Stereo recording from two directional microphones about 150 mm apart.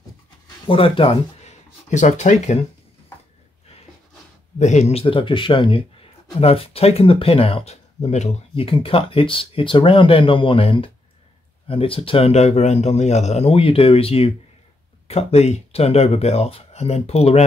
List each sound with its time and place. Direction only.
0.7 s speech: 35° left (ahead or behind)
4.6 s speech: 50° left (ahead or behind)